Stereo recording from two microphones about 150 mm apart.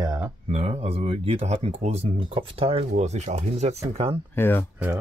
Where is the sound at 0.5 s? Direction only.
45° right (ahead or behind).